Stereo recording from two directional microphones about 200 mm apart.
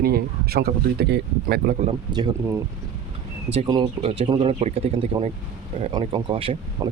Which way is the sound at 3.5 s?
30° right (ahead or behind).